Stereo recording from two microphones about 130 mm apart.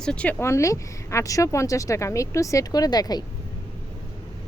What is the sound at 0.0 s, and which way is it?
Speech, 10° left (ahead or behind).